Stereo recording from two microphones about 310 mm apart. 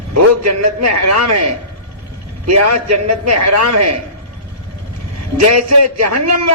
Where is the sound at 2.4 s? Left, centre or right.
Right.